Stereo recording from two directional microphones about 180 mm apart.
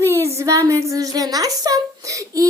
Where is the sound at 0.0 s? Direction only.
15° right (ahead or behind).